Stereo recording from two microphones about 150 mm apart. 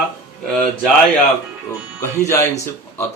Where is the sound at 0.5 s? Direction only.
5° left (ahead or behind).